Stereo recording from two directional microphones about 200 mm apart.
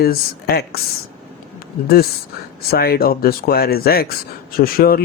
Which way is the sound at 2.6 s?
50° left (ahead or behind).